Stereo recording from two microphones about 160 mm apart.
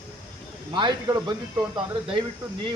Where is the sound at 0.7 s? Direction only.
30° right (ahead or behind).